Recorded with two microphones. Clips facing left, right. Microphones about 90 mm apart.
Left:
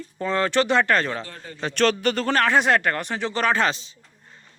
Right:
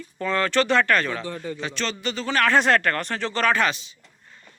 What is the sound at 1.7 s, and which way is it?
Speech, 55° left (ahead or behind).